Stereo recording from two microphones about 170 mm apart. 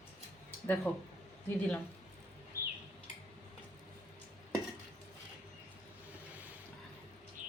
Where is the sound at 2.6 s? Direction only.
60° right (ahead or behind).